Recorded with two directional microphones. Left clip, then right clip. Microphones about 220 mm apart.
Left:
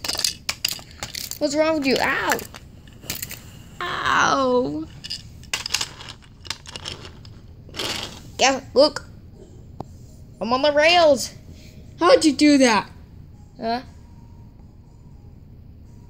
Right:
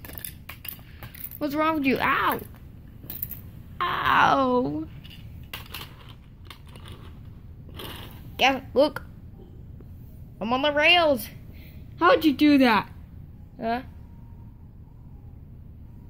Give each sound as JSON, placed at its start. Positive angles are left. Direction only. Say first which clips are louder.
{"t": 0.0, "sound": "a sound", "louder": "left 19 dB", "side_deg": 45}
{"t": 1.4, "sound": "speech", "louder": "left 4 dB", "side_deg": 0}
{"t": 3.7, "sound": "wail", "louder": "left 1 dB", "side_deg": 0}
{"t": 5.0, "sound": "coin", "louder": "left 14 dB", "side_deg": 30}
{"t": 6.4, "sound": "a sound", "louder": "left 15 dB", "side_deg": 40}
{"t": 8.4, "sound": "speech", "louder": "left 4 dB", "side_deg": 5}
{"t": 10.4, "sound": "speech", "louder": "left 4 dB", "side_deg": 5}